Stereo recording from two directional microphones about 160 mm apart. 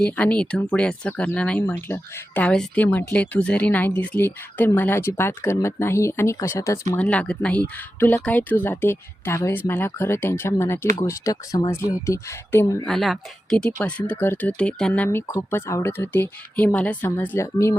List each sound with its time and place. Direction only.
0.0 s speech: 5° left (ahead or behind)
12.8 s speech: centre (ahead or behind); by 17.7 s 15° left (ahead or behind)